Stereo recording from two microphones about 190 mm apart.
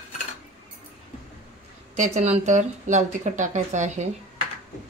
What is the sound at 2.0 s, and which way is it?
A woman's voice, 35° right (ahead or behind).